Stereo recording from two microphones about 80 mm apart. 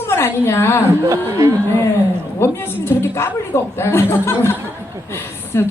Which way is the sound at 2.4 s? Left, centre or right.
Left.